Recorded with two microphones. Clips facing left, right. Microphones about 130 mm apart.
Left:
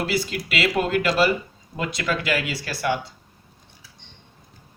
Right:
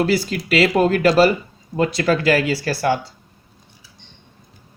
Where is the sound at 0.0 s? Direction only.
40° right (ahead or behind).